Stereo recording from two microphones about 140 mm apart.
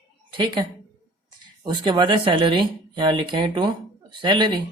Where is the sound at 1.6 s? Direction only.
35° right (ahead or behind).